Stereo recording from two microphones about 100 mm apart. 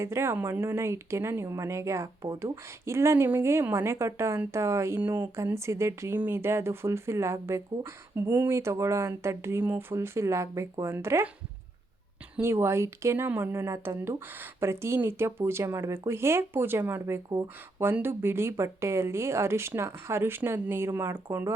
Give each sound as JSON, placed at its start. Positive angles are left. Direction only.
{"t": 0.0, "sound": "speech", "side_deg": -25}
{"t": 12.4, "sound": "speech", "side_deg": -25}